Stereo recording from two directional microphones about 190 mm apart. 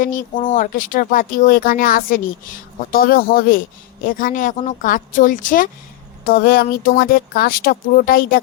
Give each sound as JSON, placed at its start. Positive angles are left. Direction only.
{"t": 0.0, "sound": "speech", "side_deg": 45}